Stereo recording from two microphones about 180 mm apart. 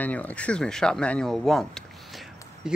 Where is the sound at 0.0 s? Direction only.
10° left (ahead or behind).